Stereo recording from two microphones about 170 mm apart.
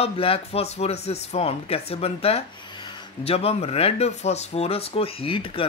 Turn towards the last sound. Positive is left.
turn(degrees=30)  # may be behind; listen again after turning